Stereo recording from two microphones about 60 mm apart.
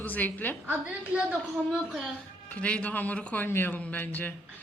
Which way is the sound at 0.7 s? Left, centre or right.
Right.